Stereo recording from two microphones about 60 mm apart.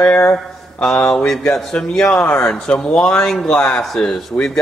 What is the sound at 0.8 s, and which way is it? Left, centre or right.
Speech, centre.